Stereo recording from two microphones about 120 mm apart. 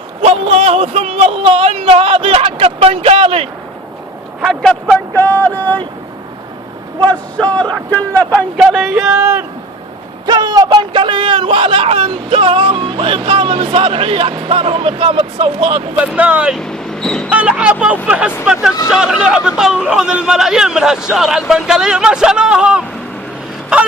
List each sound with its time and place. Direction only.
0.2 s a sound: 55° right (ahead or behind)
4.4 s speech: centre (ahead or behind)
5.1 s a sound: 15° left (ahead or behind)
7.1 s a man's voice: 10° left (ahead or behind)
8.6 s a man's voice: centre (ahead or behind)
9.2 s a man's voice: 25° right (ahead or behind); by 15.8 s 50° right (ahead or behind)
16.1 s speech: 10° right (ahead or behind)
16.6 s vehicle: 5° left (ahead or behind)
17.2 s a man's voice: 10° right (ahead or behind)